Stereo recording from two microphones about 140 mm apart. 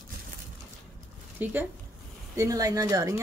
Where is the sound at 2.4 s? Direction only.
25° right (ahead or behind).